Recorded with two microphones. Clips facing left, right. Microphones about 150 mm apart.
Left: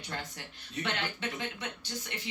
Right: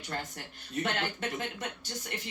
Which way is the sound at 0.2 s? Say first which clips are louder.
Right 2 dB; 45° right (ahead or behind).